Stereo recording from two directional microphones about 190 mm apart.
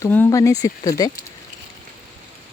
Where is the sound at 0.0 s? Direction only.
15° left (ahead or behind).